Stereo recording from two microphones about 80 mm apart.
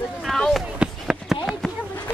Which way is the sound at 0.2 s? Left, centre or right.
Centre.